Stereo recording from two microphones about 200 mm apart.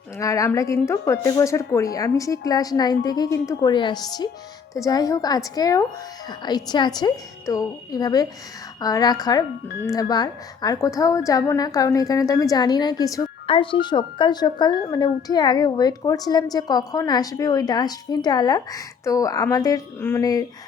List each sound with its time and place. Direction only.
0.2 s a woman's voice: 15° left (ahead or behind)